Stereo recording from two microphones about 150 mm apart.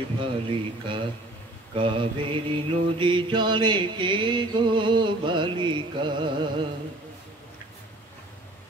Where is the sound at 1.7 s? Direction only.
35° right (ahead or behind).